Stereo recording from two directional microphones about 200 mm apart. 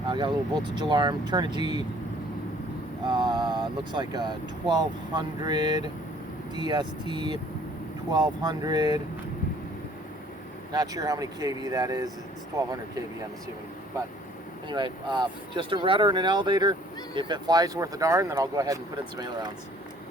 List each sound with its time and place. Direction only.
0.1 s speech: 25° right (ahead or behind)
3.1 s speech: 20° right (ahead or behind)
10.7 s speech: 20° right (ahead or behind)
14.7 s speech: 25° right (ahead or behind)